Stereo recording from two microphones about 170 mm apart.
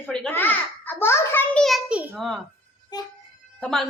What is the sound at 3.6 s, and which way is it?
Speech, centre (ahead or behind).